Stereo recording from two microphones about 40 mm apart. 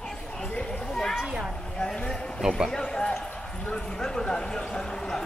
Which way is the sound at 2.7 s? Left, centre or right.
Centre.